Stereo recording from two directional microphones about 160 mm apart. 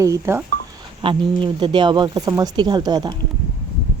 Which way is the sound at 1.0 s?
30° right (ahead or behind).